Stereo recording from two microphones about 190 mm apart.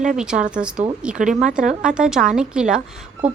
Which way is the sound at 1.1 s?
40° right (ahead or behind).